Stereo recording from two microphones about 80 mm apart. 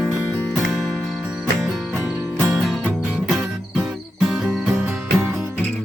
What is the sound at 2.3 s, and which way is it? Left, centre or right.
Music, right.